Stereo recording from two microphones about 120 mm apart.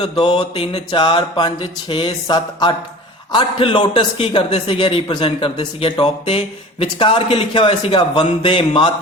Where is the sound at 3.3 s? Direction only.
45° left (ahead or behind).